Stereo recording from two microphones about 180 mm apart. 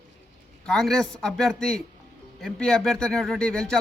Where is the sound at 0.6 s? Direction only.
Centre (ahead or behind).